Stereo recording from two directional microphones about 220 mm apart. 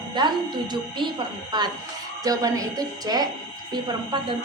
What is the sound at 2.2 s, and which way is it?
A woman's voice, 15° right (ahead or behind).